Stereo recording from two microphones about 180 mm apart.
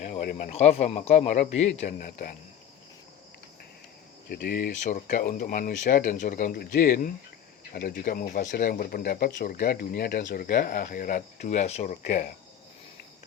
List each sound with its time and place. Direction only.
0.0 s a sound: 50° left (ahead or behind)
0.5 s speech: 35° left (ahead or behind)
4.3 s speech: 55° left (ahead or behind)